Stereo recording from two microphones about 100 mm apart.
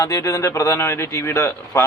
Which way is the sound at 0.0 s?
35° left (ahead or behind).